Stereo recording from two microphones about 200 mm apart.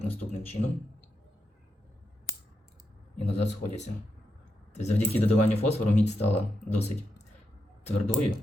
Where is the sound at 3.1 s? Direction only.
35° left (ahead or behind).